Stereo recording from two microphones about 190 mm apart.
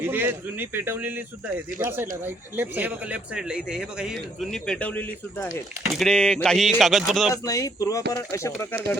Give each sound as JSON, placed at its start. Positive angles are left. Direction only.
{"t": 0.0, "sound": "a man's voice", "side_deg": -10}
{"t": 7.4, "sound": "speech", "side_deg": 20}